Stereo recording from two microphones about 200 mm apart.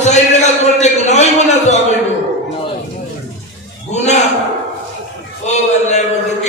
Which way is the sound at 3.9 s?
35° left (ahead or behind).